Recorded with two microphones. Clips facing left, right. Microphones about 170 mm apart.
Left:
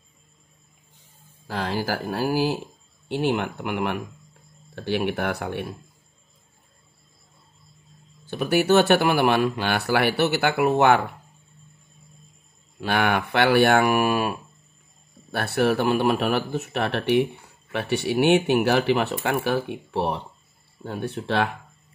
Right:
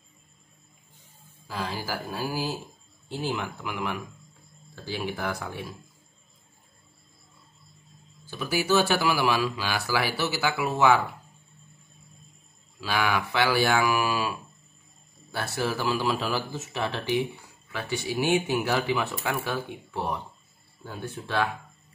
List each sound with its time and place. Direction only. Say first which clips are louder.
1.5 s speech: left 6 dB; 65° left (ahead or behind)
8.3 s speech: left 6 dB; 65° left (ahead or behind)
12.8 s speech: left 4 dB; 60° left (ahead or behind)